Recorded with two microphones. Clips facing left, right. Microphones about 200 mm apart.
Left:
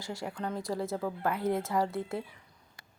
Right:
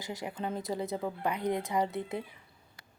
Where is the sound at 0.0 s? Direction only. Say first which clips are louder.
Even; 20° right (ahead or behind).